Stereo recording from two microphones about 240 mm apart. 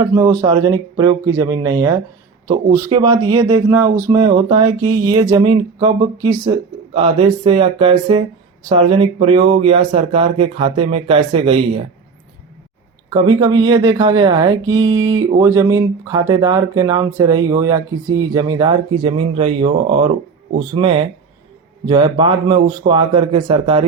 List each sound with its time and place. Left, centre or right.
0.0 s speech: centre
13.1 s speech: centre
14.8 s speech: right
15.4 s speech: centre